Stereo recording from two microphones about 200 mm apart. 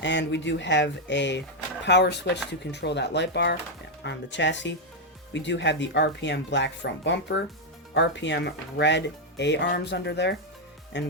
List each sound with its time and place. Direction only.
0.0 s speech: 60° left (ahead or behind)